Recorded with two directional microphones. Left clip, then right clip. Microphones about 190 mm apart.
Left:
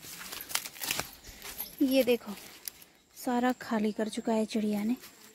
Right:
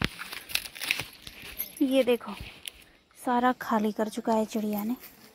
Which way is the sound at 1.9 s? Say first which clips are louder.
Right 2 dB; centre (ahead or behind).